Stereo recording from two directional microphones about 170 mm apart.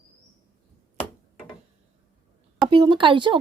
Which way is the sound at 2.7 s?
30° right (ahead or behind).